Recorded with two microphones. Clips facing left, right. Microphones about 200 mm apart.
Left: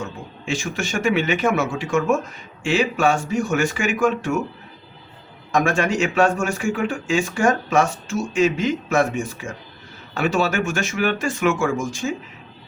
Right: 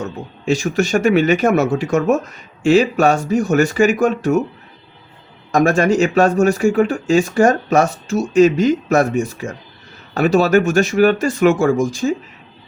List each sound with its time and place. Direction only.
0.0 s speech: 40° right (ahead or behind)
5.5 s speech: 40° right (ahead or behind)